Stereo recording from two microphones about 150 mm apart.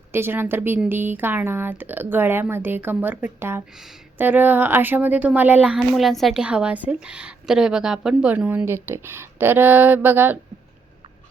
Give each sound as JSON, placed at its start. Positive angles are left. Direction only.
{"t": 0.1, "sound": "a woman's voice", "side_deg": -15}
{"t": 3.7, "sound": "a woman's voice", "side_deg": -5}